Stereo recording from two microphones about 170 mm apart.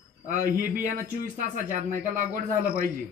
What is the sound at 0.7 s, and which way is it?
Speech, 50° right (ahead or behind).